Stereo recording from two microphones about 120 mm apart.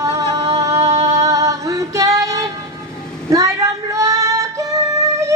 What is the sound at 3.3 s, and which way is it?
Female singing, 25° right (ahead or behind).